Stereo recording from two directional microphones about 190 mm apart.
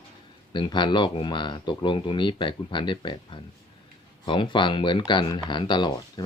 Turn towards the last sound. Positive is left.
turn(degrees=25)  # may be behind; listen again after turning